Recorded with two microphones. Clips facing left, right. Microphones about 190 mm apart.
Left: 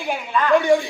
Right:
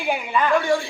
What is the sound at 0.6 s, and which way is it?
Speech, 20° left (ahead or behind).